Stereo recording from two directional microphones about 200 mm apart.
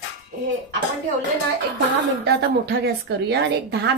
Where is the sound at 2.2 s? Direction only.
50° right (ahead or behind).